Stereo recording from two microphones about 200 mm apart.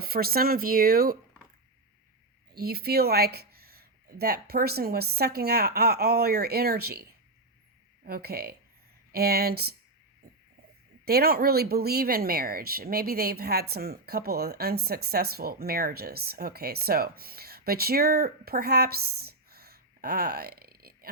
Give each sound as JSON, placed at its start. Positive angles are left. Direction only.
{"t": 0.0, "sound": "speech", "side_deg": -50}
{"t": 2.5, "sound": "speech", "side_deg": -50}
{"t": 11.0, "sound": "speech", "side_deg": -50}